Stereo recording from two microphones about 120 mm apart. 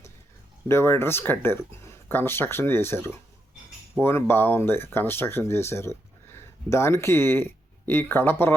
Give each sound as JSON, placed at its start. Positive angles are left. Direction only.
{"t": 0.7, "sound": "speech", "side_deg": 20}